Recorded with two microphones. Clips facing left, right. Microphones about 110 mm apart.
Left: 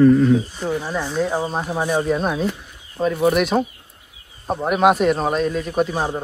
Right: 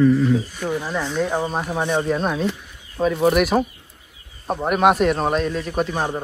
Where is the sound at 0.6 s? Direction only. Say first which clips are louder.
Left 1 dB; 15° left (ahead or behind).